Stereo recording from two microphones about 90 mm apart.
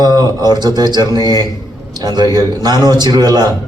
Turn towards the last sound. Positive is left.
turn(degrees=-50)  # may be behind; listen again after turning